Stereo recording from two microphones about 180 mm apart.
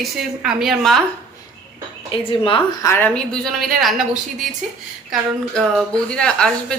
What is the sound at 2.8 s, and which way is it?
Speech, 10° left (ahead or behind).